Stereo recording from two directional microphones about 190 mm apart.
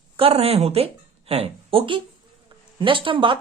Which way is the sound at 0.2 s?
30° right (ahead or behind).